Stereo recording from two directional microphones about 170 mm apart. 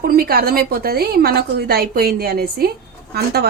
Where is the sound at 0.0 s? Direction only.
60° right (ahead or behind).